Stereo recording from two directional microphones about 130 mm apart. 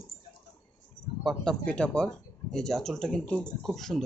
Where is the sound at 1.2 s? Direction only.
5° left (ahead or behind).